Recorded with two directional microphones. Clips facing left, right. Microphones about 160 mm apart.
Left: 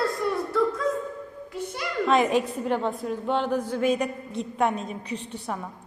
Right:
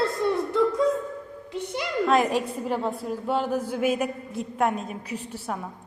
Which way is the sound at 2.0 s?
Centre (ahead or behind).